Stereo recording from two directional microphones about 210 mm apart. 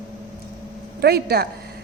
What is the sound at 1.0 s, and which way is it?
Speech, 50° right (ahead or behind).